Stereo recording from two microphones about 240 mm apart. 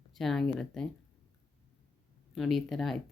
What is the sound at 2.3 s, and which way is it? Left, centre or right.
Speech, centre.